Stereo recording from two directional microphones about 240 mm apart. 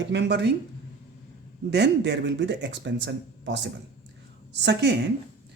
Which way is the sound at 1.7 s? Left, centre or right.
Right.